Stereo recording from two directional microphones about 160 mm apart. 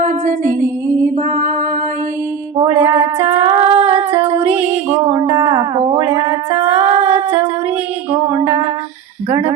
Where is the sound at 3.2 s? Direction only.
35° right (ahead or behind).